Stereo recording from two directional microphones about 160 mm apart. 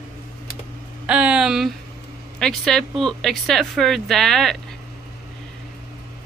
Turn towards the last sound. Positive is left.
turn(degrees=5)  # may be behind; listen again after turning